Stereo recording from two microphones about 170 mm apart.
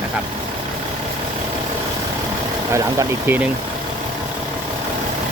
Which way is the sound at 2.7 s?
15° right (ahead or behind).